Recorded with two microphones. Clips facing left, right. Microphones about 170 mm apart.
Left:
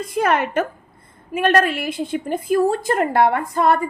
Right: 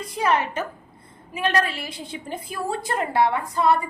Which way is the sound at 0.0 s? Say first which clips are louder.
Left 3 dB; 55° left (ahead or behind).